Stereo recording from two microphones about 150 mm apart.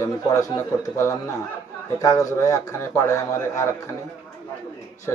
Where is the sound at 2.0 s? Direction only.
25° left (ahead or behind).